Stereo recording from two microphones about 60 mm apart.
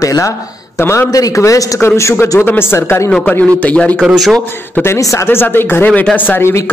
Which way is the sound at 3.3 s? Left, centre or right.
Left.